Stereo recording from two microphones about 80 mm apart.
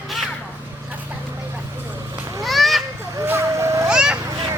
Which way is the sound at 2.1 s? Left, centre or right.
Right.